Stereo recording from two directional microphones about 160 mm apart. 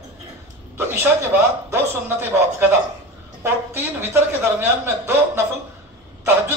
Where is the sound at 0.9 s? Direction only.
15° right (ahead or behind).